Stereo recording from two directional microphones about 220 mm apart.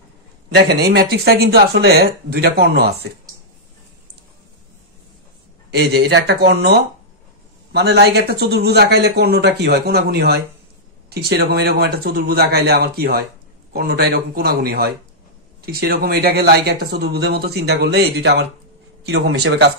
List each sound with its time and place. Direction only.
0.6 s speech: 50° right (ahead or behind)
5.7 s speech: 50° right (ahead or behind)